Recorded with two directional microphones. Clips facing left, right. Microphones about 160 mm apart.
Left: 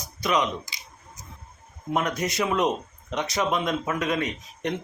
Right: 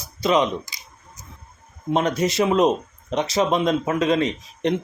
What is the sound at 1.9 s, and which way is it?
Speech, 25° right (ahead or behind).